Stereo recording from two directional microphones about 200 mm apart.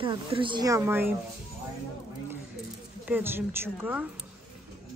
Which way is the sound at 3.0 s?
10° right (ahead or behind).